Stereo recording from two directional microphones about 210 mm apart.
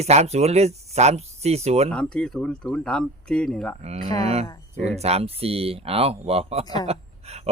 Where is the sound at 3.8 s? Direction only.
30° right (ahead or behind).